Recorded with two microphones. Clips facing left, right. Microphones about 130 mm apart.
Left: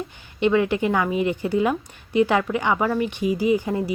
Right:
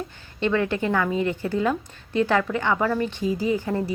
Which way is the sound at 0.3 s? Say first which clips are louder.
Left 3 dB; 15° left (ahead or behind).